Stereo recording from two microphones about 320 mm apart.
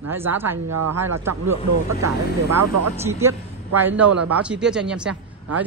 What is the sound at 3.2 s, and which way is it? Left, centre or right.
Speech, centre.